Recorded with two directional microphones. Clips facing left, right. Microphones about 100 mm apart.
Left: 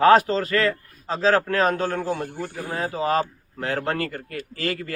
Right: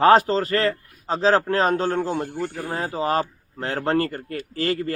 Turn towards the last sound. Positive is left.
turn(degrees=-35)  # may be behind; listen again after turning